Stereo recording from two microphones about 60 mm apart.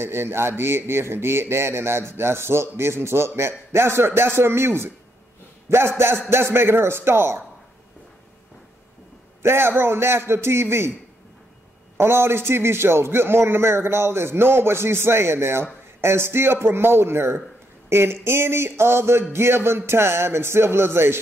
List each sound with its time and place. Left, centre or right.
0.0 s speech: right
9.4 s speech: right
12.0 s speech: right